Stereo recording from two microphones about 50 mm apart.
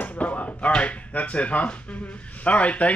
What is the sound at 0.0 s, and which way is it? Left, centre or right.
Speech, left.